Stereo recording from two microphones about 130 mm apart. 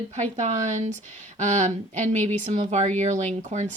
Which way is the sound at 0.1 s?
65° right (ahead or behind).